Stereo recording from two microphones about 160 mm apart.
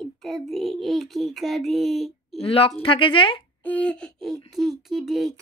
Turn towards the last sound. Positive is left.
turn(degrees=0)  # may be behind; listen again after turning